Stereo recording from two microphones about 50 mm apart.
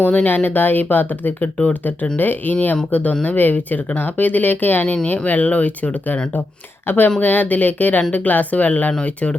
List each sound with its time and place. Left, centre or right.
0.0 s speech: left